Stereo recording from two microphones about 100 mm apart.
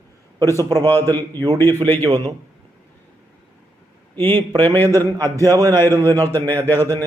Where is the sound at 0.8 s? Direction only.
20° left (ahead or behind).